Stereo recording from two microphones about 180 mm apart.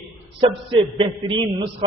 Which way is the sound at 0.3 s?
30° right (ahead or behind).